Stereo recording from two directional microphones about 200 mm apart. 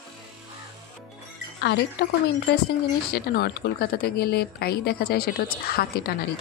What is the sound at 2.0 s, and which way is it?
Speech, 55° left (ahead or behind).